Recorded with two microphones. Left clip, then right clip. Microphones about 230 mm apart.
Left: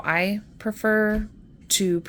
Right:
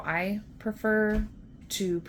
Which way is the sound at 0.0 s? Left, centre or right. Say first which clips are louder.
Left 7 dB; left.